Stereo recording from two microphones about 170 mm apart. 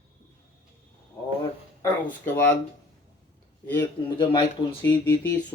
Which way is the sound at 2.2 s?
15° left (ahead or behind).